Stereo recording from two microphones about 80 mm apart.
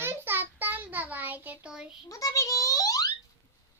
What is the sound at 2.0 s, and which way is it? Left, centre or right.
A child's voice, left.